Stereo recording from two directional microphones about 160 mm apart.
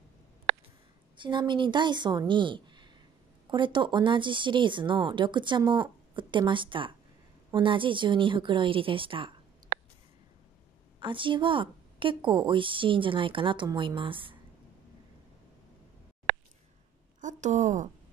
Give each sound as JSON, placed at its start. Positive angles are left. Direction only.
{"t": 1.1, "sound": "speech", "side_deg": -30}
{"t": 11.0, "sound": "speech", "side_deg": -30}
{"t": 17.2, "sound": "a woman's voice", "side_deg": -50}